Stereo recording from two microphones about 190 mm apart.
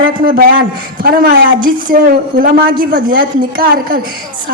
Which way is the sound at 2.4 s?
50° right (ahead or behind).